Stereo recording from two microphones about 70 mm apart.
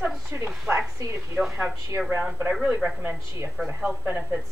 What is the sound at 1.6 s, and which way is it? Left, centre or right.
A woman's voice, centre.